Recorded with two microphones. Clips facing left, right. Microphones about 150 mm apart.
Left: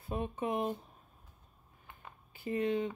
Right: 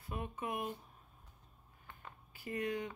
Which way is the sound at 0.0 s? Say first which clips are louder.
Left 6 dB; 30° left (ahead or behind).